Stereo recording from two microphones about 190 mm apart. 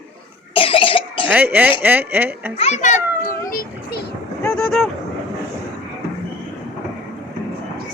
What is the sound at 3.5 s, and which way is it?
Speech, 50° left (ahead or behind).